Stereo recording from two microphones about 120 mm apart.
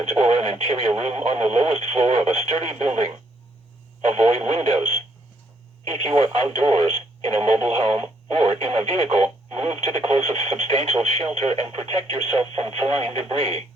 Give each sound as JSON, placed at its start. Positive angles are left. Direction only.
{"t": 0.1, "sound": "speech", "side_deg": -60}
{"t": 4.0, "sound": "speech", "side_deg": -60}